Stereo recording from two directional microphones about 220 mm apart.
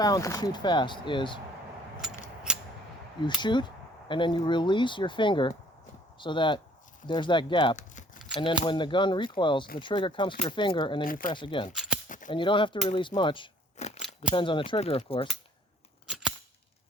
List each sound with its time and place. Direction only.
0.0 s speech: 15° left (ahead or behind)
2.5 s scissors: 5° right (ahead or behind)
3.4 s speech: 20° left (ahead or behind)
7.8 s a sound: 35° left (ahead or behind)
8.4 s speech: 20° left (ahead or behind)
11.0 s speech: 40° left (ahead or behind)
11.3 s speech: 20° left (ahead or behind)
11.7 s a sound: centre (ahead or behind)
12.0 s a sound: 35° left (ahead or behind)
12.3 s speech: 20° left (ahead or behind)